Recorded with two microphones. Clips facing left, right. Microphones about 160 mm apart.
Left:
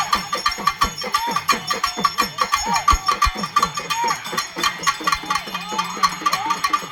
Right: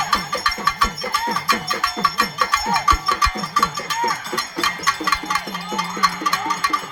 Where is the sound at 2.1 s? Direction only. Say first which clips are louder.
Right 1 dB; 15° left (ahead or behind).